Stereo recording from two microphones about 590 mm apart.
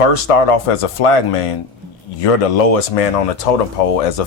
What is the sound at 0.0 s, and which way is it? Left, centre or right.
Speech, left.